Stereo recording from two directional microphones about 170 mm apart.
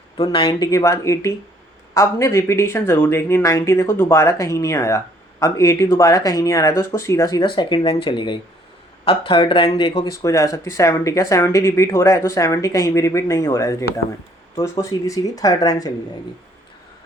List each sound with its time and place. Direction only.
0.2 s speech: 25° left (ahead or behind)